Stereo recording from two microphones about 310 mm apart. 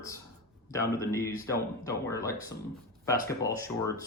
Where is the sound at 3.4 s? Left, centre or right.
Centre.